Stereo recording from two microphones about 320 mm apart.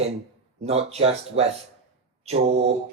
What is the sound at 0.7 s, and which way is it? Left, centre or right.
Speech, centre.